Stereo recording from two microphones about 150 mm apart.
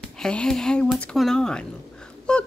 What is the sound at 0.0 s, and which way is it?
A child's voice, 5° left (ahead or behind).